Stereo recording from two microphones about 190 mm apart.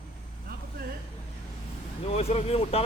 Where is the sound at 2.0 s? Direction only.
30° left (ahead or behind).